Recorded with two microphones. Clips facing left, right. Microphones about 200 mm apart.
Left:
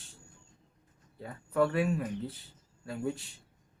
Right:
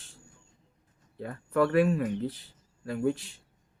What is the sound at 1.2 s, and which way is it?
Speech, 70° right (ahead or behind).